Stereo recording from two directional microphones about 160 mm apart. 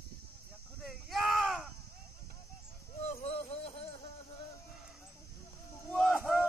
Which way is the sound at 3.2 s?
40° left (ahead or behind).